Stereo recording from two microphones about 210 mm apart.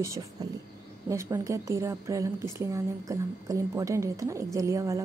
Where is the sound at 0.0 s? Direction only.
15° right (ahead or behind).